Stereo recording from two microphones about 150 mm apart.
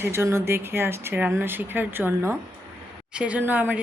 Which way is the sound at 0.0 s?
15° right (ahead or behind).